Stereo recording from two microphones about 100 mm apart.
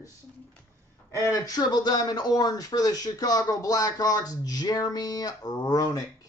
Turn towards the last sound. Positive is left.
turn(degrees=35)  # may be behind; listen again after turning